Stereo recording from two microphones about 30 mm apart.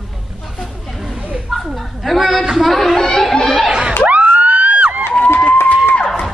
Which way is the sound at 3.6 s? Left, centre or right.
Right.